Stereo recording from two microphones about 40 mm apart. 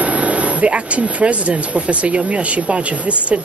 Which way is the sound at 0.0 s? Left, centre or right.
Right.